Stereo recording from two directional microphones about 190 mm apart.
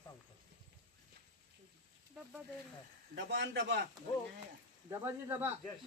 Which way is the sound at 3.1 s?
70° right (ahead or behind).